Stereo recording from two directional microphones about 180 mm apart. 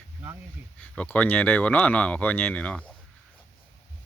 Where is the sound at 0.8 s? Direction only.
10° left (ahead or behind).